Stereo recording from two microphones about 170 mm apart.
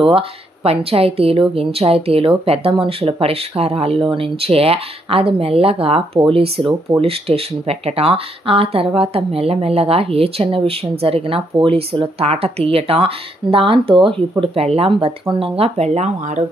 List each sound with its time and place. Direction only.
0.7 s speech: 35° right (ahead or behind)